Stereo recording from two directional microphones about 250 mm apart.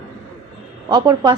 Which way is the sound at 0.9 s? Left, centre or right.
Centre.